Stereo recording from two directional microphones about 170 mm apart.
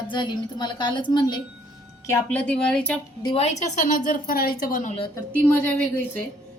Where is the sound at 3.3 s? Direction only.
40° left (ahead or behind).